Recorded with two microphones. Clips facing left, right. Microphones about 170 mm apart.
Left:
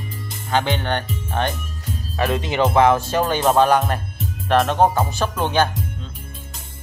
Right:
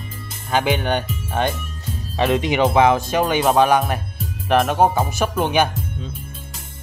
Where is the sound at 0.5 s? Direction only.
10° right (ahead or behind).